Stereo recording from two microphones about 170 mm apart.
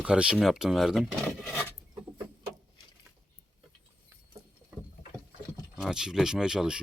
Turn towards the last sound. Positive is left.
turn(degrees=-5)  # may be behind; listen again after turning